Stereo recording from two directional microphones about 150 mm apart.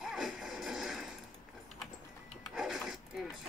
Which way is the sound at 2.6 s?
Centre (ahead or behind).